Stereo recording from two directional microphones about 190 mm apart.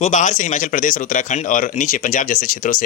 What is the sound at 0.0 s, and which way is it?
A man's voice, 40° left (ahead or behind).